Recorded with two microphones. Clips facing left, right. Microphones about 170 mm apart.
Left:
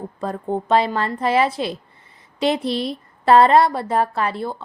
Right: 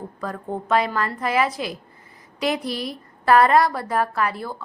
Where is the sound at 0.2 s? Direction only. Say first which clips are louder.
Left 5 dB; 25° left (ahead or behind).